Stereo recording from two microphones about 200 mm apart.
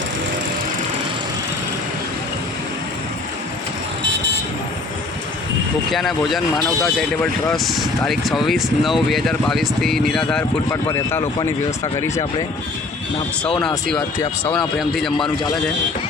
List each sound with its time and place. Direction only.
5.9 s speech: centre (ahead or behind)
13.6 s speech: 5° left (ahead or behind)